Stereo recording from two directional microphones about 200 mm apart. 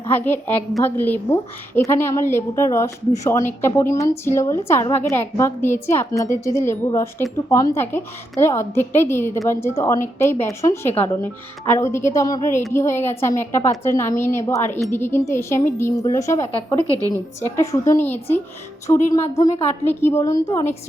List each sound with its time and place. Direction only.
0.1 s a woman's voice: 10° left (ahead or behind)
17.0 s a woman's voice: 15° right (ahead or behind)
17.4 s a woman's voice: 15° left (ahead or behind)
18.9 s speech: 25° left (ahead or behind)
19.8 s a woman's voice: 10° left (ahead or behind)